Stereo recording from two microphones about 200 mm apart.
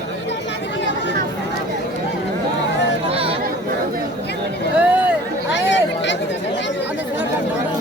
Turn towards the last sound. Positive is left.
turn(degrees=65)  # may be behind; listen again after turning